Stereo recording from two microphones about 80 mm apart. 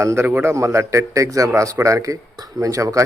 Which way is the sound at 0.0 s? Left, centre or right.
Right.